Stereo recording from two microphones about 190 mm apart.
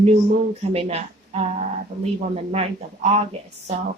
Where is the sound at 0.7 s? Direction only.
35° right (ahead or behind).